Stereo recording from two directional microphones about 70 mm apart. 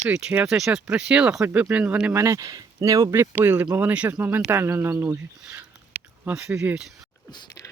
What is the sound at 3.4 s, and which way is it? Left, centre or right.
Speech, right.